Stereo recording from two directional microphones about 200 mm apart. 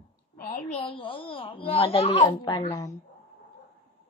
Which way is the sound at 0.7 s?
30° left (ahead or behind).